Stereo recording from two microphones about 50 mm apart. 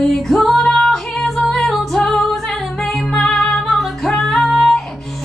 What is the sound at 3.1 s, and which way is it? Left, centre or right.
Music, centre.